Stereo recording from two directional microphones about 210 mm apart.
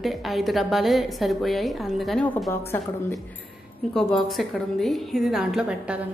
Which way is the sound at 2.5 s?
15° left (ahead or behind).